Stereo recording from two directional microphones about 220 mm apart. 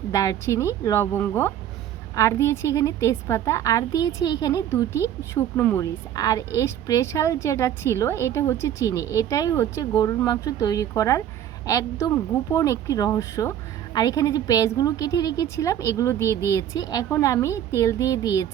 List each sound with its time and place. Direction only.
0.1 s a woman's voice: 15° left (ahead or behind)